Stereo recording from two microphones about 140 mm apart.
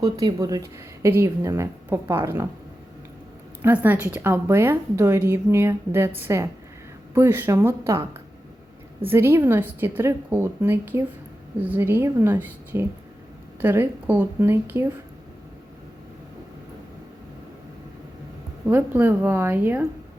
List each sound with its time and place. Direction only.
0.2 s a woman's voice: 25° right (ahead or behind)
3.6 s a woman's voice: 10° right (ahead or behind)
9.0 s a woman's voice: 15° right (ahead or behind)
18.7 s a woman's voice: 15° right (ahead or behind)